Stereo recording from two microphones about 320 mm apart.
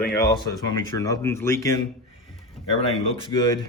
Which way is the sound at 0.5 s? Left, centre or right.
Centre.